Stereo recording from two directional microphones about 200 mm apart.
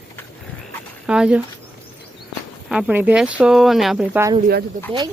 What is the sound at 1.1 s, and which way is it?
Speech, 5° right (ahead or behind).